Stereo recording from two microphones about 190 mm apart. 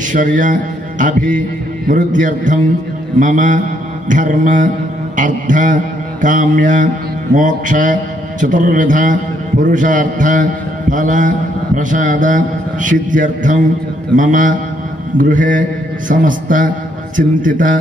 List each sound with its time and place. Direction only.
0.1 s mantra: 45° right (ahead or behind)
4.1 s a man's voice: 40° right (ahead or behind)
6.2 s mantra: 40° right (ahead or behind)